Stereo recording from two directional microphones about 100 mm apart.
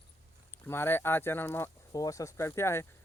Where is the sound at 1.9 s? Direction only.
35° left (ahead or behind).